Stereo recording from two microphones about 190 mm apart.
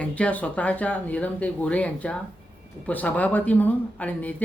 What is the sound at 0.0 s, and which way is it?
Speech, 5° left (ahead or behind).